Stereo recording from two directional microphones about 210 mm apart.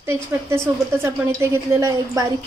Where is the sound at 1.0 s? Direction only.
10° right (ahead or behind).